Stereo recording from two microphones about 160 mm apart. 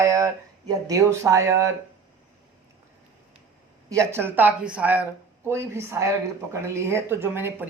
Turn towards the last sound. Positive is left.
turn(degrees=-15)  # may be behind; listen again after turning